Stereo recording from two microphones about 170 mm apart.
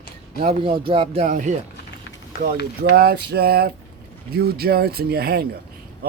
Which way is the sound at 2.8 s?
65° right (ahead or behind).